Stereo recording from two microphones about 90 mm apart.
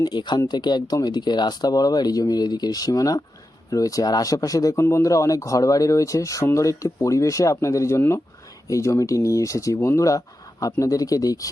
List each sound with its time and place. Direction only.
0.0 s speech: 55° left (ahead or behind)